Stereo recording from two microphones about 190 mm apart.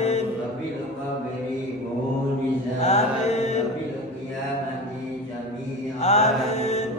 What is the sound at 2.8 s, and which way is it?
Mantra, 35° left (ahead or behind).